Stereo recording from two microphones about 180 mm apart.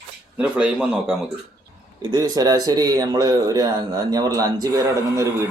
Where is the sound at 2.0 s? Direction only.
25° right (ahead or behind).